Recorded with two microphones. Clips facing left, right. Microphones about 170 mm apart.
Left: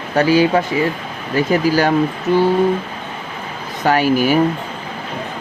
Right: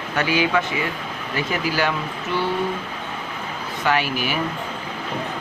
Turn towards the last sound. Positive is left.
turn(degrees=40)  # may be behind; listen again after turning